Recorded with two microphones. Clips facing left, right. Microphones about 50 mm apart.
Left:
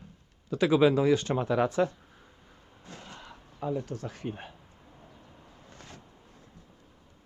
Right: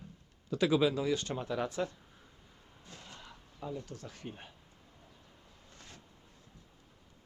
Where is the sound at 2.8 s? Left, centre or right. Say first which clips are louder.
Left 6 dB; left.